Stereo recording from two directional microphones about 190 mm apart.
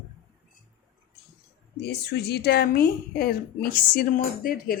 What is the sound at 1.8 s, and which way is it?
Speech, 60° left (ahead or behind).